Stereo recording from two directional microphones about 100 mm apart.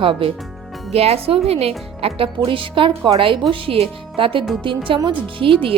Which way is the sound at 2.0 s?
70° right (ahead or behind).